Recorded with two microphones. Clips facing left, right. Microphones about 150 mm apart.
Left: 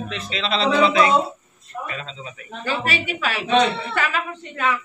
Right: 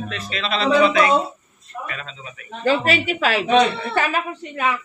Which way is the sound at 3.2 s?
30° right (ahead or behind).